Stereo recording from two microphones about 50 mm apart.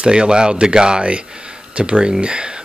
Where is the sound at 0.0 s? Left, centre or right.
Centre.